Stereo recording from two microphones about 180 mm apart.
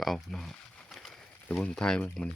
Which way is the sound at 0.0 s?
Centre (ahead or behind).